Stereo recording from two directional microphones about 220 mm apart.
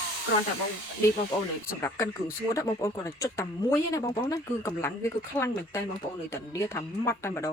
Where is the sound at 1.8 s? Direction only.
10° left (ahead or behind).